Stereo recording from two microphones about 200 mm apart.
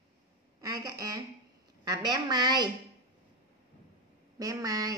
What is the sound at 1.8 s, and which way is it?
Speech, 20° right (ahead or behind).